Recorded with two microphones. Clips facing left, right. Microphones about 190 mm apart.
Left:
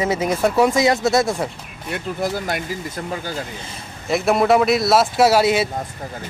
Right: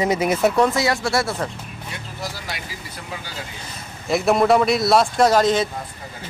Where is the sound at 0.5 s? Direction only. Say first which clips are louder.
Left 3 dB; 15° left (ahead or behind).